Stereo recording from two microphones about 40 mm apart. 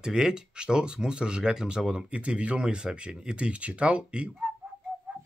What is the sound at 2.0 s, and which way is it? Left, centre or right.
Speech, right.